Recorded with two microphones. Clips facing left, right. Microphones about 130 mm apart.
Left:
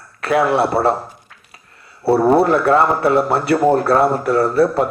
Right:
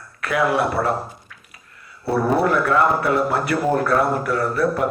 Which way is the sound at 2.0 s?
30° left (ahead or behind).